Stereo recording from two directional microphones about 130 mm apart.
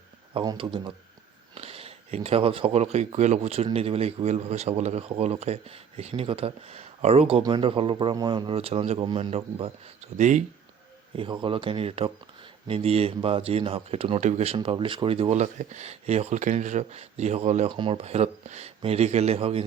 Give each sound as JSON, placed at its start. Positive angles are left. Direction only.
{"t": 0.5, "sound": "speech", "side_deg": -40}
{"t": 9.0, "sound": "speech", "side_deg": -35}
{"t": 9.3, "sound": "speech", "side_deg": -50}
{"t": 14.2, "sound": "speech", "side_deg": -60}
{"t": 17.7, "sound": "speech", "side_deg": -40}